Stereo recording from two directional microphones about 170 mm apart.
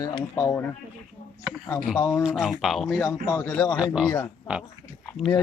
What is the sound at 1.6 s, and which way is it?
Speech, 5° left (ahead or behind).